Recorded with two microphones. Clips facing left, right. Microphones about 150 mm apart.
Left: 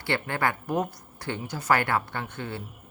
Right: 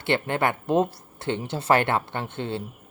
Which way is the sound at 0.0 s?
20° right (ahead or behind).